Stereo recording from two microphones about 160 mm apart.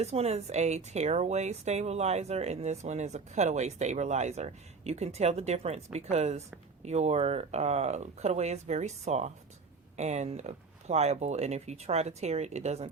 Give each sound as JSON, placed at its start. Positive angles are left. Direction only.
{"t": 0.0, "sound": "speech", "side_deg": -40}